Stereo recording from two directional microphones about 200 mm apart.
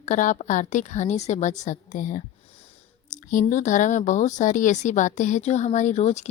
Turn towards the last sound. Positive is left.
turn(degrees=35)  # may be behind; listen again after turning